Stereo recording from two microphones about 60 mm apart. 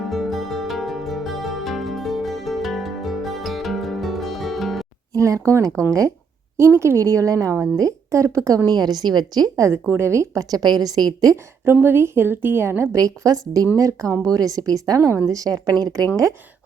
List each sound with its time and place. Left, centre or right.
0.1 s music: centre
5.1 s speech: right
6.6 s a woman's voice: right
9.9 s a woman's voice: right
10.5 s a woman's voice: right
11.6 s a woman's voice: right
12.9 s a woman's voice: right
15.3 s a woman's voice: right